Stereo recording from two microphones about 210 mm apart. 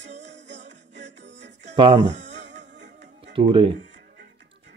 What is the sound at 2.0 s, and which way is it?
Speech, 60° right (ahead or behind).